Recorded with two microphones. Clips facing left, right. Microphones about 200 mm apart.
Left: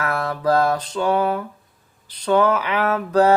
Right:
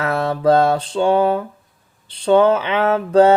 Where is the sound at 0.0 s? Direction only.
25° right (ahead or behind).